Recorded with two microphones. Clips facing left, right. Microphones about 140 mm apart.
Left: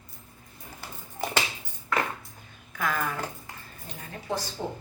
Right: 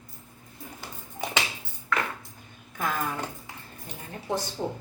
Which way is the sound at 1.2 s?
10° left (ahead or behind).